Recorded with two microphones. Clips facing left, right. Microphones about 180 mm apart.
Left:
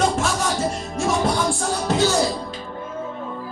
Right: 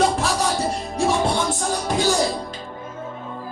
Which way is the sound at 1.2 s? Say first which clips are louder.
Left 1 dB; 25° right (ahead or behind).